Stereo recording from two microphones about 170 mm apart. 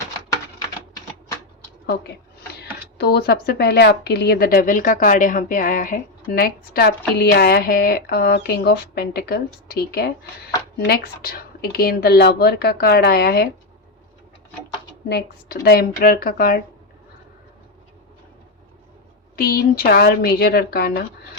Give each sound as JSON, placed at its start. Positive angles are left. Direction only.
{"t": 3.0, "sound": "a woman's voice", "side_deg": 70}
{"t": 15.1, "sound": "a woman's voice", "side_deg": 65}
{"t": 19.4, "sound": "a woman's voice", "side_deg": 60}